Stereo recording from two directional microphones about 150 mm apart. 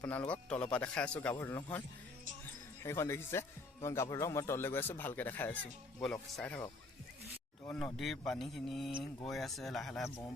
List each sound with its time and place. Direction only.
0.0 s speech: 10° left (ahead or behind)
2.8 s speech: 20° left (ahead or behind)
7.9 s a man's voice: centre (ahead or behind)